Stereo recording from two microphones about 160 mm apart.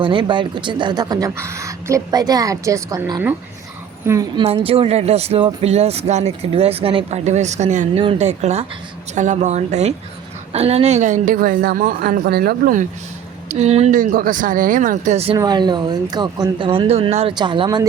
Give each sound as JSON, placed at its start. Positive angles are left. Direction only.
{"t": 0.0, "sound": "a woman's voice", "side_deg": -30}
{"t": 4.4, "sound": "speech", "side_deg": -35}
{"t": 13.5, "sound": "speech", "side_deg": -45}
{"t": 15.4, "sound": "speech", "side_deg": -25}